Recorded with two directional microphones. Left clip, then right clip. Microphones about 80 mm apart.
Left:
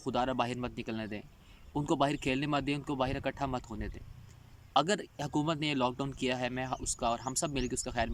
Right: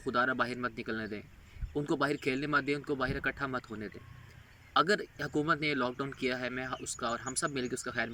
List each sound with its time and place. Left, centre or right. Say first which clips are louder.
0.0 s speech: right 2 dB; left